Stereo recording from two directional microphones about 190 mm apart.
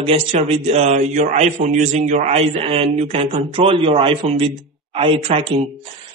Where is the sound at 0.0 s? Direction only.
35° right (ahead or behind).